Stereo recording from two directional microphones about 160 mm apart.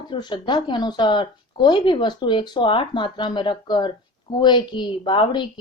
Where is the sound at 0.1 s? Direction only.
30° left (ahead or behind).